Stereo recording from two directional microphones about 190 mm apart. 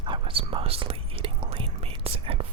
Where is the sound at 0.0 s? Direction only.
25° right (ahead or behind).